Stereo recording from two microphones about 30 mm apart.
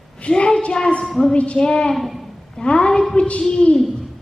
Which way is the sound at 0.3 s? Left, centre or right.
Left.